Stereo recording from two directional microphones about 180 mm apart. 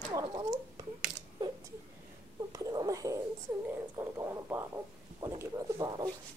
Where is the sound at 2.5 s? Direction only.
20° right (ahead or behind).